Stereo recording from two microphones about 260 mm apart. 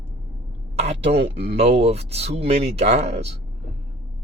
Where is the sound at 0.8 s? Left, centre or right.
Right.